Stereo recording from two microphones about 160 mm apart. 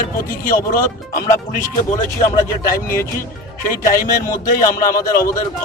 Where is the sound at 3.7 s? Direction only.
60° left (ahead or behind).